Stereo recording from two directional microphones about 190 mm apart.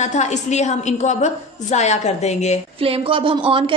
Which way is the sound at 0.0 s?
40° left (ahead or behind).